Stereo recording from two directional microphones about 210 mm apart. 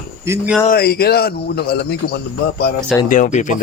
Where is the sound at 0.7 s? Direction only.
45° left (ahead or behind).